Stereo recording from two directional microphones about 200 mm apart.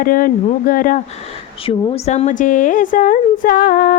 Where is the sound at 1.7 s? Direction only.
30° left (ahead or behind).